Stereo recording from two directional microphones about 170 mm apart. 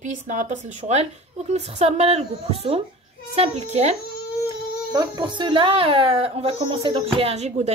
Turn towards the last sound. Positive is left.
turn(degrees=-40)  # may be behind; listen again after turning